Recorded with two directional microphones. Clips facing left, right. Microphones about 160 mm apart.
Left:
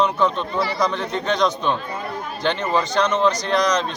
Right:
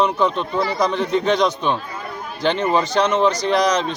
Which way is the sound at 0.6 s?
20° right (ahead or behind).